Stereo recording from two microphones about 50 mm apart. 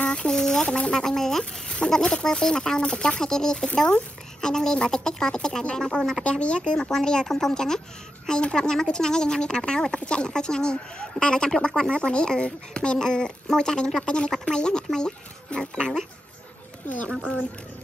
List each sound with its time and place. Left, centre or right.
0.0 s speech: centre
1.4 s speech: left